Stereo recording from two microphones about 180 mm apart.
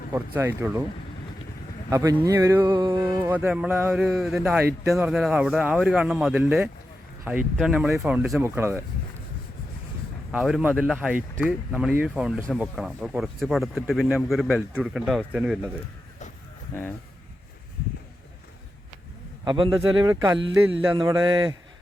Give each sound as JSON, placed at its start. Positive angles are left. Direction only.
{"t": 0.1, "sound": "speech", "side_deg": -15}
{"t": 1.9, "sound": "speech", "side_deg": -15}
{"t": 10.3, "sound": "speech", "side_deg": -5}
{"t": 19.5, "sound": "speech", "side_deg": -25}
{"t": 20.4, "sound": "speech", "side_deg": -90}
{"t": 20.9, "sound": "speech", "side_deg": -20}